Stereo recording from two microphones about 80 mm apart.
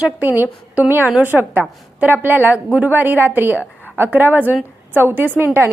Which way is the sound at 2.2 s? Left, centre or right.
Right.